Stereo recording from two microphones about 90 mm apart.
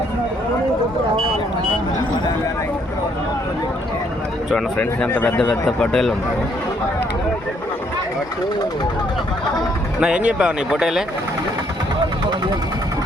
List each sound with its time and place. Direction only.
5.0 s speech: 20° left (ahead or behind)
10.0 s speech: 10° right (ahead or behind)